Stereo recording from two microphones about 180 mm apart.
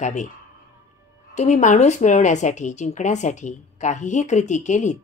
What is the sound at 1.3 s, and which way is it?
Speech, 40° left (ahead or behind).